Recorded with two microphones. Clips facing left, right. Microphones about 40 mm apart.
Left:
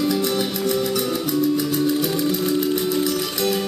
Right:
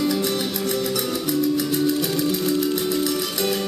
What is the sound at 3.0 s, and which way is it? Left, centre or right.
Music, centre.